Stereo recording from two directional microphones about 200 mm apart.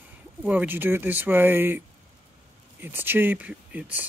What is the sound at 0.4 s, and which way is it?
Speech, 10° right (ahead or behind).